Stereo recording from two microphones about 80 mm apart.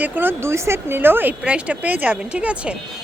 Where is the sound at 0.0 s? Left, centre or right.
Right.